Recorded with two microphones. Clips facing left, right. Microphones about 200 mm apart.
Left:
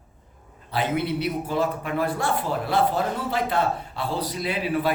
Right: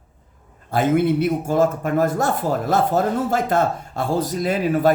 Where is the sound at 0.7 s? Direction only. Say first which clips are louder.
Right 7 dB; 45° right (ahead or behind).